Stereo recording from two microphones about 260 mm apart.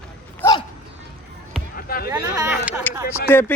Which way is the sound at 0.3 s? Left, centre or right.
Centre.